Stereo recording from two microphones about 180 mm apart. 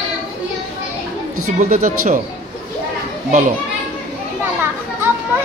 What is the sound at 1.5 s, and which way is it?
Speech, 50° right (ahead or behind).